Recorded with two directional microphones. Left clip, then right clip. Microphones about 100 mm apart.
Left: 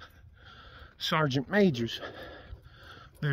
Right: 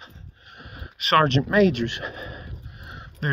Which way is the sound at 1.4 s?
30° left (ahead or behind).